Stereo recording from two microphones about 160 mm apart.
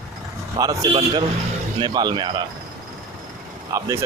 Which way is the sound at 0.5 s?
20° right (ahead or behind).